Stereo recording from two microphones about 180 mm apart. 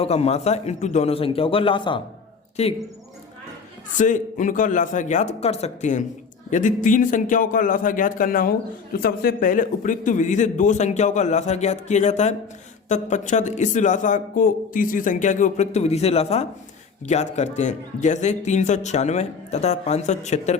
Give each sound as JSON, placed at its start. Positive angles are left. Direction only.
{"t": 0.0, "sound": "a man's voice", "side_deg": 35}
{"t": 3.9, "sound": "a man's voice", "side_deg": 45}